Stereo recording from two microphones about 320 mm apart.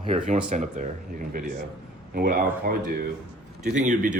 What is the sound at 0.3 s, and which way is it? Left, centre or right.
Speech, right.